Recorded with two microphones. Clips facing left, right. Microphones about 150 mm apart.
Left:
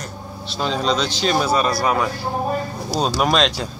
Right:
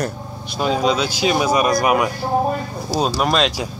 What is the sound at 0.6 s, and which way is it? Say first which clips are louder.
Speech: right 3 dB; 10° right (ahead or behind).